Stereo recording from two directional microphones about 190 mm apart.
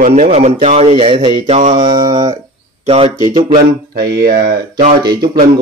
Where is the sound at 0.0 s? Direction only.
40° right (ahead or behind); by 2.3 s 20° right (ahead or behind).